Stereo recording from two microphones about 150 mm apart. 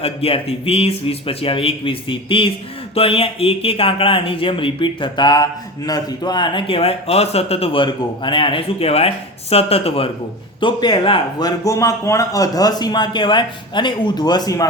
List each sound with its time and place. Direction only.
0.0 s speech: 40° left (ahead or behind); by 14.7 s 25° left (ahead or behind)